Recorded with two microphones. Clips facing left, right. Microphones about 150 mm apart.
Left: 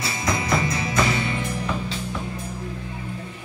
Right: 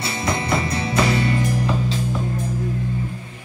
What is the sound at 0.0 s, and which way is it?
Music, 30° right (ahead or behind).